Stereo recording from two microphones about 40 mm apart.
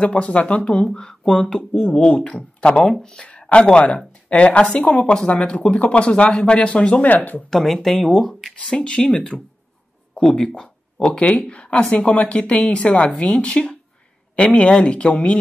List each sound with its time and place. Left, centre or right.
0.0 s speech: left
1.9 s speech: left
2.9 s speech: centre
3.3 s speech: left
5.0 s speech: left
5.3 s speech: left
7.4 s speech: centre
8.6 s speech: left